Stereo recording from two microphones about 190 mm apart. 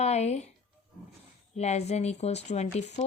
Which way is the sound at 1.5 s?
35° left (ahead or behind).